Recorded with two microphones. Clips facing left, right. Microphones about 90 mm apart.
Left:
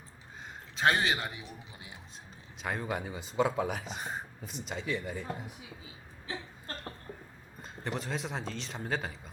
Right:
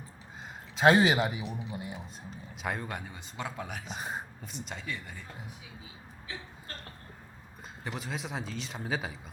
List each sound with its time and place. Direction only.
0.8 s speech: 5° right (ahead or behind)
6.2 s a sound: 35° left (ahead or behind)
7.9 s speech: 5° right (ahead or behind)